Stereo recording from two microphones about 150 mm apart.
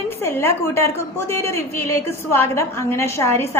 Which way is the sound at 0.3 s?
15° left (ahead or behind).